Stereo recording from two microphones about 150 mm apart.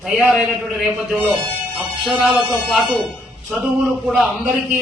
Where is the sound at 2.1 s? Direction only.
5° right (ahead or behind).